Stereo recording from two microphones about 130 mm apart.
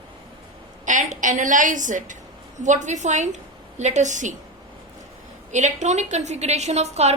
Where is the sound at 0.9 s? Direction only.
75° right (ahead or behind).